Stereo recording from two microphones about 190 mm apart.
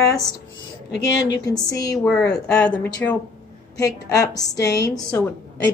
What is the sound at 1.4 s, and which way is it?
A woman's voice, 20° left (ahead or behind).